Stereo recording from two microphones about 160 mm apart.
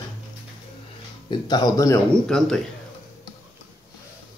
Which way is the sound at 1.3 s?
25° left (ahead or behind).